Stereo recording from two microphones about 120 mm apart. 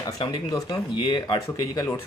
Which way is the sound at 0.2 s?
35° left (ahead or behind).